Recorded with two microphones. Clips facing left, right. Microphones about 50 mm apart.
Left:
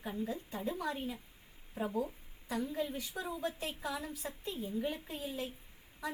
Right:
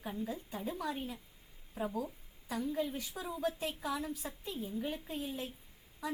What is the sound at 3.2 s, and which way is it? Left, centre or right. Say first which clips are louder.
Speech: left 4 dB; left.